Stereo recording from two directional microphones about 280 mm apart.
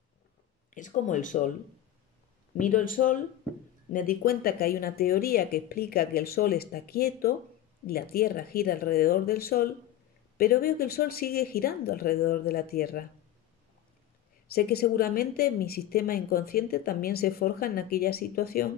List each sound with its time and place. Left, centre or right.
0.7 s speech: left
2.6 s a woman's voice: left
14.5 s a woman's voice: left